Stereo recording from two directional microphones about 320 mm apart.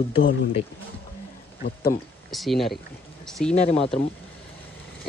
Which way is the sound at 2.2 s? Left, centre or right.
Centre.